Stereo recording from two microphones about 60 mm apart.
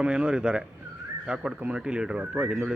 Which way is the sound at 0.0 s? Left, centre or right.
Centre.